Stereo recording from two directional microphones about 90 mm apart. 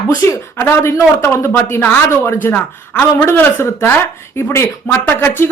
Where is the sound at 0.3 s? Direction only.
25° left (ahead or behind).